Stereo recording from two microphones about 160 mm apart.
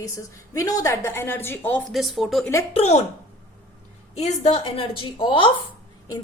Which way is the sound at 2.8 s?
40° left (ahead or behind).